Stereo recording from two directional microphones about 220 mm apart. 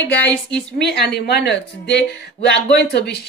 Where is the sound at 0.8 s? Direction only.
50° left (ahead or behind).